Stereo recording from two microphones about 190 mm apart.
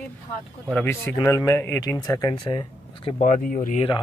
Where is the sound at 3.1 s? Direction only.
40° left (ahead or behind).